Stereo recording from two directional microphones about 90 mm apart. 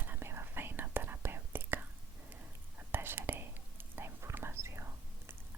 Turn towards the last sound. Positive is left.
turn(degrees=-30)  # may be behind; listen again after turning